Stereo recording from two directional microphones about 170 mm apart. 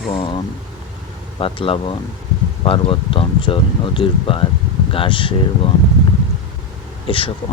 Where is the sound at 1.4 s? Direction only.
30° left (ahead or behind).